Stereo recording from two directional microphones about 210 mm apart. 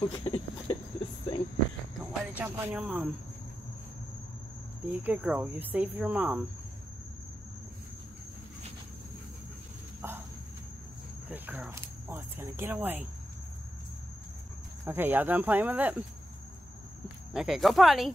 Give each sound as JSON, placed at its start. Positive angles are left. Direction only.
{"t": 0.0, "sound": "a sound", "side_deg": 25}
{"t": 2.0, "sound": "speech", "side_deg": -5}
{"t": 4.9, "sound": "speech", "side_deg": -5}
{"t": 10.0, "sound": "insect", "side_deg": -10}
{"t": 11.2, "sound": "cricket", "side_deg": -10}
{"t": 14.9, "sound": "speech", "side_deg": -10}
{"t": 17.3, "sound": "speech", "side_deg": 0}